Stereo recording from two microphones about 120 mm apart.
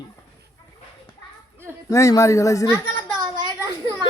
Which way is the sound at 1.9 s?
25° left (ahead or behind).